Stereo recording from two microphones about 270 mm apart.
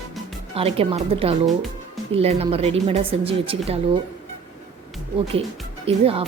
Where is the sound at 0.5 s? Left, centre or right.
Right.